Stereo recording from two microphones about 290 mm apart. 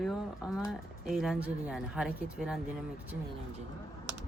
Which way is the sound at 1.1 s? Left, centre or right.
Centre.